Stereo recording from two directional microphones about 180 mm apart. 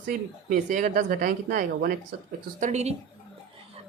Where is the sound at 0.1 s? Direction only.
50° right (ahead or behind).